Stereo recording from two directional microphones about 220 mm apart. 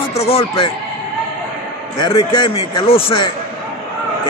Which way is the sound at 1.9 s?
20° left (ahead or behind).